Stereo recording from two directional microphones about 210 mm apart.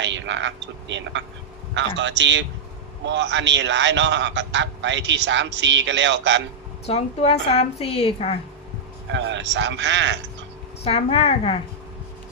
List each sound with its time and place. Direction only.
0.0 s a man's voice: 60° right (ahead or behind)
6.8 s a woman's voice: 30° left (ahead or behind)
9.1 s a man's voice: 60° right (ahead or behind)
10.8 s a woman's voice: 30° left (ahead or behind)